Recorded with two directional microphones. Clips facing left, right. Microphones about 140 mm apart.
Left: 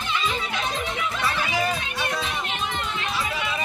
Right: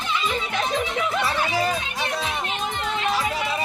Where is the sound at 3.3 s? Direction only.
40° right (ahead or behind).